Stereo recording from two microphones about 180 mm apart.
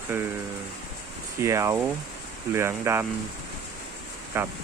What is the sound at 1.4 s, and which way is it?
Speech, 15° right (ahead or behind).